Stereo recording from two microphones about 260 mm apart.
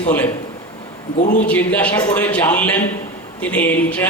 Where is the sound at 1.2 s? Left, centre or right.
Left.